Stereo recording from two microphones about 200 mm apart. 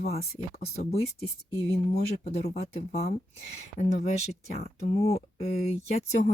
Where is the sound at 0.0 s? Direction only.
30° left (ahead or behind).